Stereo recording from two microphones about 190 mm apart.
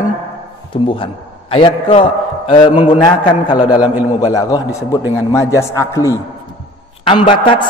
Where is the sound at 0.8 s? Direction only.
30° left (ahead or behind).